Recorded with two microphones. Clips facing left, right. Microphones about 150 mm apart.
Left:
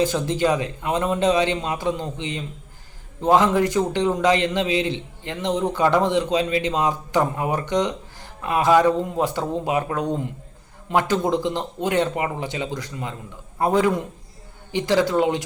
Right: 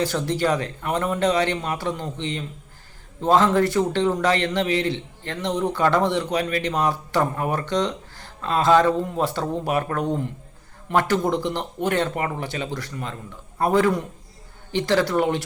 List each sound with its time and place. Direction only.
0.0 s a man's voice: 20° left (ahead or behind)